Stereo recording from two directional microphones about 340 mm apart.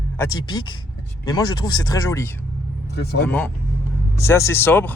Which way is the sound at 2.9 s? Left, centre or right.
Left.